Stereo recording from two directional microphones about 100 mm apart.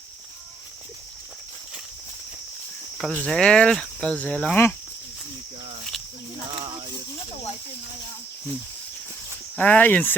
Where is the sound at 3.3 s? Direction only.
10° left (ahead or behind).